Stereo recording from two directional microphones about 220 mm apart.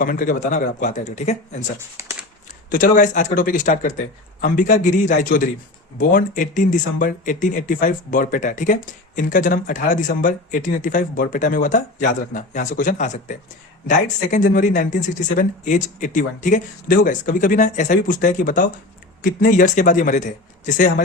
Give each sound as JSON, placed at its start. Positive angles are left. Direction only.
{"t": 0.0, "sound": "speech", "side_deg": 40}
{"t": 2.6, "sound": "speech", "side_deg": 40}